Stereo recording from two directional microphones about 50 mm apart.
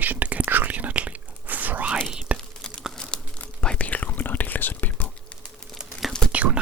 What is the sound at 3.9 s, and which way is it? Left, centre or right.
Whispering, left.